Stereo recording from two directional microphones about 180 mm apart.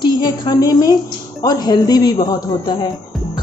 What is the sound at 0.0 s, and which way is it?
A woman's voice, 25° left (ahead or behind).